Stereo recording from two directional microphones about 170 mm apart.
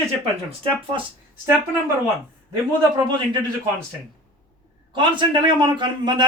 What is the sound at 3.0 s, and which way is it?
Speech, 25° right (ahead or behind).